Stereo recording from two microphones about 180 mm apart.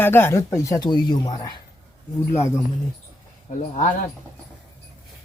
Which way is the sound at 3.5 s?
45° left (ahead or behind).